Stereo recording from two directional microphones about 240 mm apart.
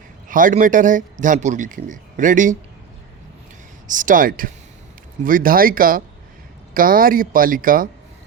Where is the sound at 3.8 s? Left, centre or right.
Right.